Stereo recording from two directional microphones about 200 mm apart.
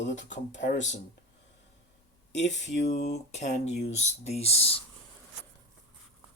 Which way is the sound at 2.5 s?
35° left (ahead or behind).